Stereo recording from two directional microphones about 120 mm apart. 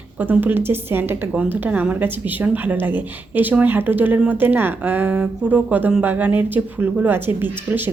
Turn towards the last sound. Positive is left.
turn(degrees=-15)  # may be behind; listen again after turning